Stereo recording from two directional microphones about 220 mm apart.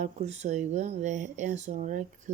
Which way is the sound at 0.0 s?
30° right (ahead or behind).